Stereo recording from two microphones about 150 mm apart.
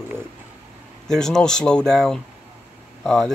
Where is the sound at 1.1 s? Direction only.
5° left (ahead or behind).